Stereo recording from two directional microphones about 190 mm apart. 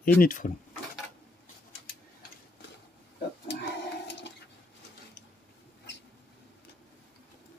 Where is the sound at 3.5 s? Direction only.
65° left (ahead or behind).